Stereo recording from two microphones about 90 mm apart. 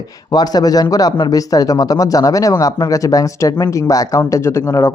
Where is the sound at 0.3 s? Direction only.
45° left (ahead or behind).